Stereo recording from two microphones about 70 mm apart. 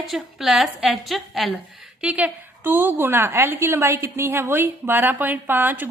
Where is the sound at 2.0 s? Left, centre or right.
Centre.